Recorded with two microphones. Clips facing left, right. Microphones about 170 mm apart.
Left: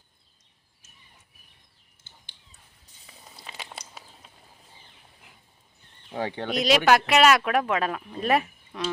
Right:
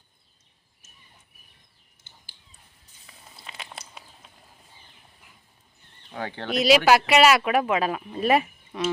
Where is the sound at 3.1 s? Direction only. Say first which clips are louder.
Left 1 dB; centre (ahead or behind).